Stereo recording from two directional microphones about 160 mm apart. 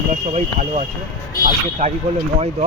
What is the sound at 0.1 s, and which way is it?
Speech, 45° right (ahead or behind).